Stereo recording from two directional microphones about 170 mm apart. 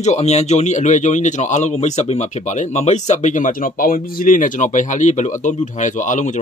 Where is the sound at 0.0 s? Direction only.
40° left (ahead or behind).